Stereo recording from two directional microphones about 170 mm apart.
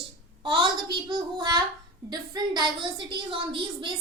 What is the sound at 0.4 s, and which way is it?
A woman's voice, 30° right (ahead or behind).